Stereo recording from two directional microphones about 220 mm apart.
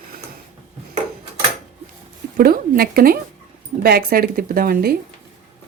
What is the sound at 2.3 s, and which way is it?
Speech, 40° right (ahead or behind).